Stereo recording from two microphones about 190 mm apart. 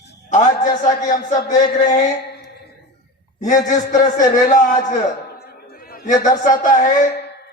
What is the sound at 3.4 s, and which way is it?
Speech, 40° left (ahead or behind).